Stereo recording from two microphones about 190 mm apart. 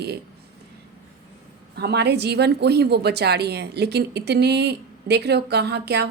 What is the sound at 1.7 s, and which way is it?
A woman's voice, 60° right (ahead or behind).